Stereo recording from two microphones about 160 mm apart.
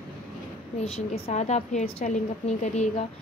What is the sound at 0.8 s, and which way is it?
A woman's voice, 45° left (ahead or behind).